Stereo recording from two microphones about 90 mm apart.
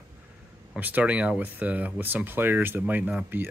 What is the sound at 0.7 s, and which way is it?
Speech, 20° right (ahead or behind).